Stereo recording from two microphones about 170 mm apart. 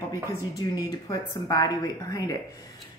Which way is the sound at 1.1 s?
20° left (ahead or behind).